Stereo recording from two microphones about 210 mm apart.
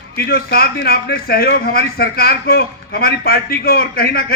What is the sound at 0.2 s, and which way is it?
A man's voice, 45° left (ahead or behind).